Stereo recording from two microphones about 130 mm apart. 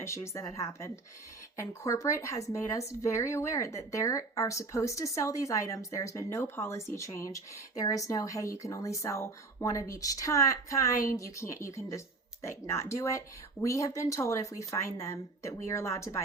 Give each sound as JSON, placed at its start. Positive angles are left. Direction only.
{"t": 0.0, "sound": "speech", "side_deg": 20}